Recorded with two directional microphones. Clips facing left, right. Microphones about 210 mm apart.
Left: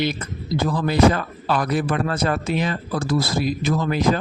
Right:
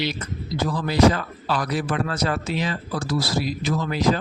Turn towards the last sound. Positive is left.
turn(degrees=50)  # may be behind; listen again after turning